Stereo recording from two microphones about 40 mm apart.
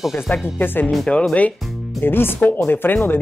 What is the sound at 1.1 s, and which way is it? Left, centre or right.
Speech, left.